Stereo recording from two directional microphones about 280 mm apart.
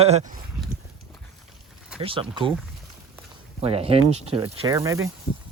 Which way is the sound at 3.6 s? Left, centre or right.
Right.